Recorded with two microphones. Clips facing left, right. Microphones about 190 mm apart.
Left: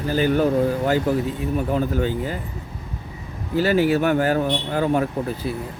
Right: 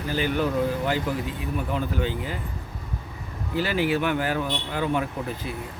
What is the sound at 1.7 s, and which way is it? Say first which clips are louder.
Speech: left 4 dB; 45° left (ahead or behind).